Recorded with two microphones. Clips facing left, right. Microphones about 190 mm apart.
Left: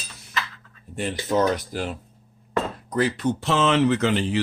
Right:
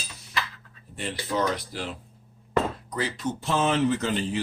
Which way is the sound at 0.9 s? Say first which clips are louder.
Left 5 dB; 50° left (ahead or behind).